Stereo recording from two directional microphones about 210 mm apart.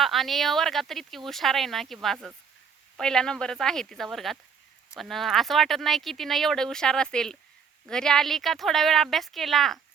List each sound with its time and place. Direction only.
0.0 s speech: centre (ahead or behind)